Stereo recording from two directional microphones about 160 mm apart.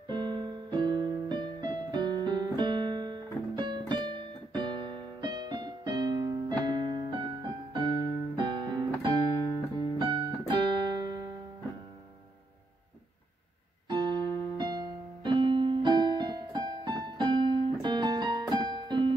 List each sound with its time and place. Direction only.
0.1 s keyboard: 25° right (ahead or behind)
9.9 s music: 30° right (ahead or behind)
13.8 s keyboard: 25° right (ahead or behind)